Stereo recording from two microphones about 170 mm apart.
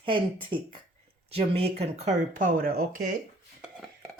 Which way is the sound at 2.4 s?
55° right (ahead or behind).